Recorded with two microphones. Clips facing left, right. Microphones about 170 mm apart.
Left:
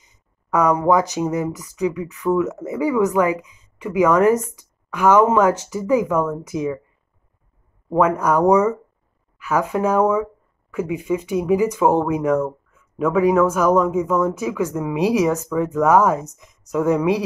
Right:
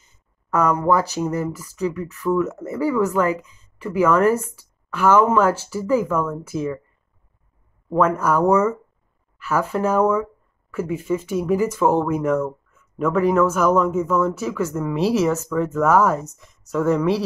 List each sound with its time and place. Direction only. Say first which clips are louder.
0.0 s speech: left 2 dB; 15° left (ahead or behind)
8.2 s speech: left 3 dB; 15° left (ahead or behind)